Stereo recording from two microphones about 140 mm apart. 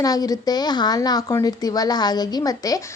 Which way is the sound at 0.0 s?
25° left (ahead or behind).